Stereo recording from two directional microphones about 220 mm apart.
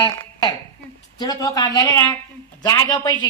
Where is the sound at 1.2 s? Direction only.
15° left (ahead or behind).